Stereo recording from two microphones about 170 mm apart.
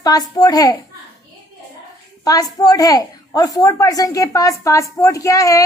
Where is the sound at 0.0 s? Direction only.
20° left (ahead or behind).